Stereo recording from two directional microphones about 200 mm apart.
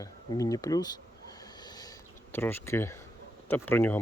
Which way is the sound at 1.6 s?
20° left (ahead or behind).